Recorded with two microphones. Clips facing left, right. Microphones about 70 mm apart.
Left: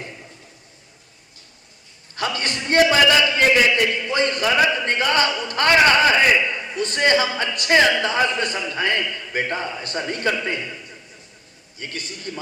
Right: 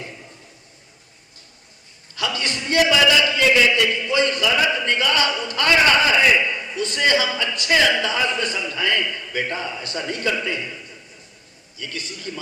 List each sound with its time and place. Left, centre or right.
2.1 s a man's voice: left
3.8 s a man's voice: left
6.3 s a man's voice: left
11.8 s a man's voice: left